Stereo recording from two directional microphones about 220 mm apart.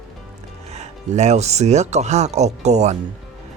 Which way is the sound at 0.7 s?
30° right (ahead or behind).